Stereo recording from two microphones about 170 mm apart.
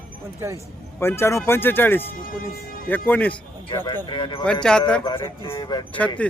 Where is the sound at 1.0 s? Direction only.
15° left (ahead or behind).